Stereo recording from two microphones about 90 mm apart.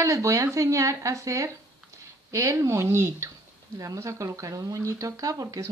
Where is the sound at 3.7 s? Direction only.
40° right (ahead or behind).